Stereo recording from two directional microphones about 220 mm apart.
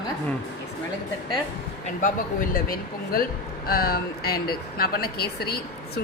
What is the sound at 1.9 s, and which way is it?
Speech, 40° left (ahead or behind).